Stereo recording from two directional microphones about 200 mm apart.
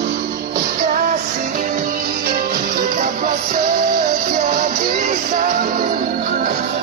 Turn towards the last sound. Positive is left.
turn(degrees=-35)  # may be behind; listen again after turning